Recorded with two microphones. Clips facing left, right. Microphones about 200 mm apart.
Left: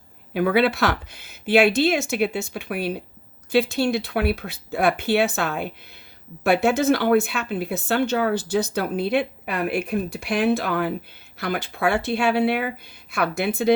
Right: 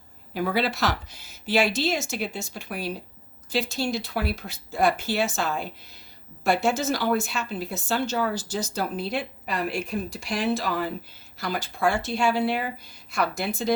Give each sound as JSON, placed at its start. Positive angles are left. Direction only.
{"t": 0.3, "sound": "speech", "side_deg": 60}